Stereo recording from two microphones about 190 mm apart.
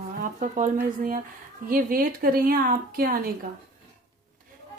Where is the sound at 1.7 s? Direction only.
50° right (ahead or behind).